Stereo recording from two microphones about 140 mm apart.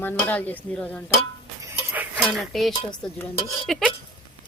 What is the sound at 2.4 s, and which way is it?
Speech, centre (ahead or behind).